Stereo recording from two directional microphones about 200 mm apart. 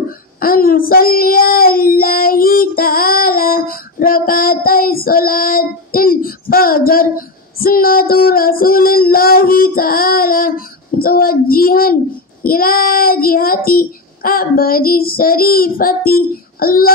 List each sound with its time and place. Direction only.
0.4 s child singing: 45° left (ahead or behind)